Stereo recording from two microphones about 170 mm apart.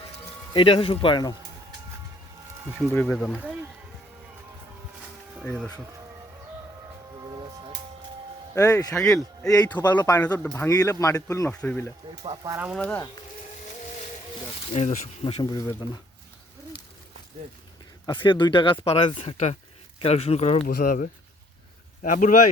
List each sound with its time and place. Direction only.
0.5 s speech: 30° left (ahead or behind)
2.6 s speech: centre (ahead or behind)
5.4 s speech: 5° left (ahead or behind)
7.3 s music: 25° right (ahead or behind)
8.5 s speech: 20° left (ahead or behind)
8.9 s speech: 5° left (ahead or behind)
9.8 s speech: 25° left (ahead or behind); by 11.9 s 10° left (ahead or behind)
12.2 s speech: 30° right (ahead or behind)
12.5 s speech: 10° right (ahead or behind)
12.7 s speech: 5° left (ahead or behind)
14.7 s speech: 40° left (ahead or behind)
18.0 s speech: 30° left (ahead or behind); by 22.4 s 50° left (ahead or behind)